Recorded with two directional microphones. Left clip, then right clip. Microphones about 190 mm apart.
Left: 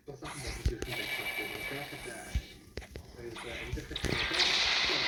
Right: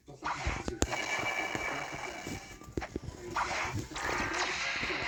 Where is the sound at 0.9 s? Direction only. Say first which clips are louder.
Even; 35° right (ahead or behind).